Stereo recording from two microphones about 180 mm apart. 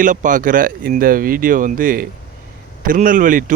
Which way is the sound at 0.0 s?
45° right (ahead or behind).